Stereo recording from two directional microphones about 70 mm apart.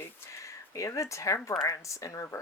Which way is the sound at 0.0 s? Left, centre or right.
Left.